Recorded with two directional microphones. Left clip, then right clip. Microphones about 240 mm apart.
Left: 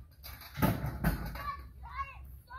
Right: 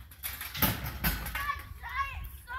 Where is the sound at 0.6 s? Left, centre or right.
Right.